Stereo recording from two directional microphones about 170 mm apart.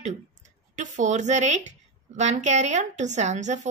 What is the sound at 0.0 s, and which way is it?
Speech, 45° right (ahead or behind).